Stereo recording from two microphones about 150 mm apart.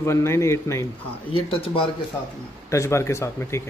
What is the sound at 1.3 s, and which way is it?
Speech, 40° left (ahead or behind).